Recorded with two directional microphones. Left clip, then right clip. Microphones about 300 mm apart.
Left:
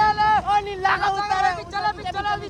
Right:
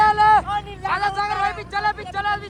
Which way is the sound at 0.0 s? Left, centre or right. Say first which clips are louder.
Right 4 dB; centre.